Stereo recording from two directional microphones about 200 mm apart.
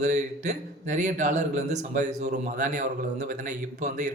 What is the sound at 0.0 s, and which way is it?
A man's voice, 35° right (ahead or behind).